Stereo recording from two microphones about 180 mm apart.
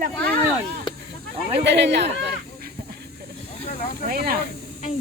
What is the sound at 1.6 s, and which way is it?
Speech, 70° right (ahead or behind).